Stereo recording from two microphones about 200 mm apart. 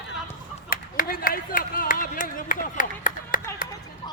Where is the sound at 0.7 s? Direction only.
45° left (ahead or behind).